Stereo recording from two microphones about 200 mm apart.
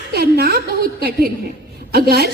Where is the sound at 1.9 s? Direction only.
50° right (ahead or behind).